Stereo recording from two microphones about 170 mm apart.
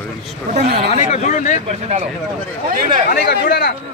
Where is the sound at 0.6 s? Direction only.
70° right (ahead or behind).